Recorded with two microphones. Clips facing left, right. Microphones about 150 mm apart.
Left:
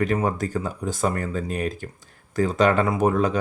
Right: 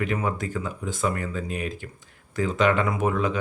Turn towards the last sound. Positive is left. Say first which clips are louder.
# left 4 dB
turn(degrees=40)  # may be behind; listen again after turning